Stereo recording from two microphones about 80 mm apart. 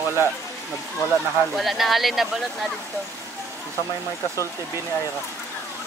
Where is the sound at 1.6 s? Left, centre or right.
Centre.